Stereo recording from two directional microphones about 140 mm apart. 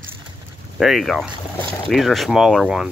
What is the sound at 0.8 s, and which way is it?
Speech, centre (ahead or behind).